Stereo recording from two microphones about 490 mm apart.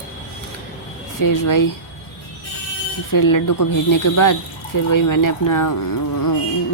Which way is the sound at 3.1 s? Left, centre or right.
Left.